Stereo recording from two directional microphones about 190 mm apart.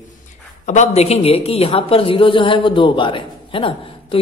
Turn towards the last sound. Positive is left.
turn(degrees=30)  # may be behind; listen again after turning